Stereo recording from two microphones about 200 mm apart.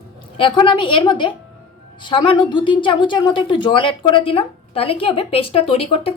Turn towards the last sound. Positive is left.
turn(degrees=30)  # may be behind; listen again after turning